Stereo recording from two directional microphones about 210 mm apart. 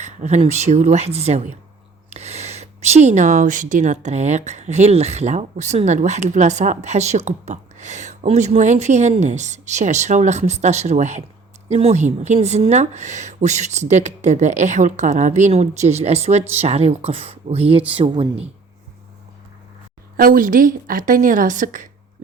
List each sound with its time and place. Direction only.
0.0 s speech: 35° right (ahead or behind)
20.1 s speech: 40° right (ahead or behind)